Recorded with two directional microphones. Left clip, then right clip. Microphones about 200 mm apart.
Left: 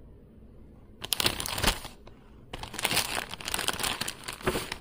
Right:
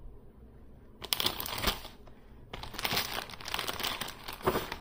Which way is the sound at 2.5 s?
50° left (ahead or behind).